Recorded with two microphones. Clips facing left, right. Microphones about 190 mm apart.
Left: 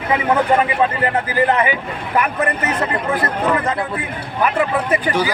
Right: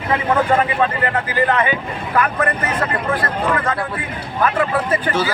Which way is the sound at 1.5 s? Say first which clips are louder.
Left 1 dB; 20° left (ahead or behind).